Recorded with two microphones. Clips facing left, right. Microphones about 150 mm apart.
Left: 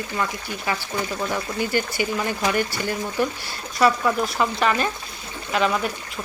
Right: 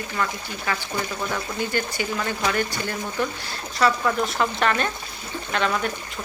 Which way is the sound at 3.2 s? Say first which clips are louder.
Left 2 dB; 10° left (ahead or behind).